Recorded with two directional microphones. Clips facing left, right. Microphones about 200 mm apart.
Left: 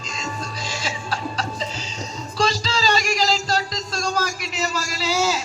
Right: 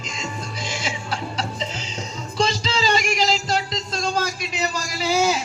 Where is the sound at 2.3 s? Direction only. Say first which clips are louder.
Even; 20° right (ahead or behind).